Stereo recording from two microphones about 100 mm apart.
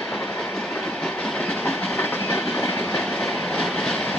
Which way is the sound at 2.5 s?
5° left (ahead or behind).